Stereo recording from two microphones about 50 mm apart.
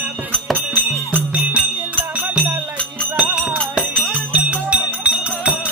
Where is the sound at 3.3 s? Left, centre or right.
Centre.